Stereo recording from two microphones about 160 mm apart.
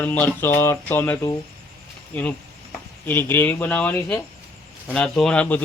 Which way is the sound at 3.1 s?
15° left (ahead or behind).